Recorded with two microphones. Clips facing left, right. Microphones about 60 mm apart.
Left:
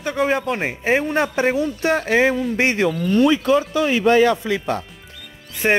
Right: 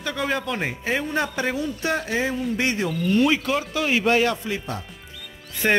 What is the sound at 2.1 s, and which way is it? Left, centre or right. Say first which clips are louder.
Speech: left 8 dB; left.